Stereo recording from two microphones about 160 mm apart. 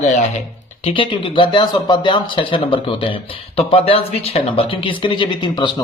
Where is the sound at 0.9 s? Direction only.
35° left (ahead or behind).